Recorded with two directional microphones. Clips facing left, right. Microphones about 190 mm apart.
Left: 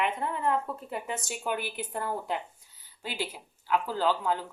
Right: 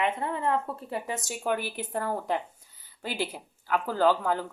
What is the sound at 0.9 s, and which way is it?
Speech, 40° right (ahead or behind).